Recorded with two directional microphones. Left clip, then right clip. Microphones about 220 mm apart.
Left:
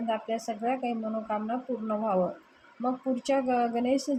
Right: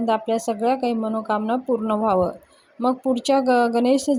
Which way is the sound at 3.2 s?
40° right (ahead or behind).